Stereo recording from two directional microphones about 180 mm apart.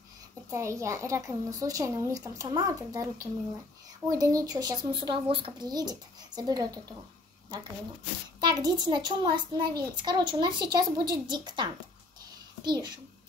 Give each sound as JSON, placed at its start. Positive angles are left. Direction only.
{"t": 0.5, "sound": "a child's voice", "side_deg": -15}
{"t": 8.4, "sound": "a child's voice", "side_deg": -25}